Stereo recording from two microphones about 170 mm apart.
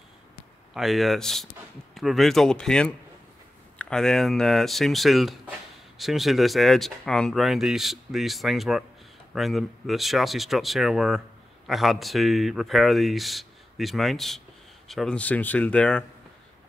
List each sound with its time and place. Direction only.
0.7 s speech: centre (ahead or behind)